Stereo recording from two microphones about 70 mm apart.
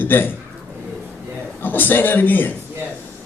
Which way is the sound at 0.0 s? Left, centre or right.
Left.